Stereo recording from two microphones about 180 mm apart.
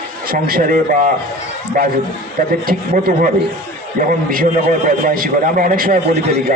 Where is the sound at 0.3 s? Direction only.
55° right (ahead or behind).